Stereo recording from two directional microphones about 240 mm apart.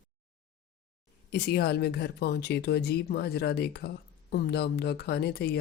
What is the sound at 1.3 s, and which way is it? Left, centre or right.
Speech, left.